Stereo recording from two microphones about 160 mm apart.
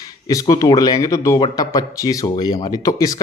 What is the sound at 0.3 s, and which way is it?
Speech, 20° left (ahead or behind).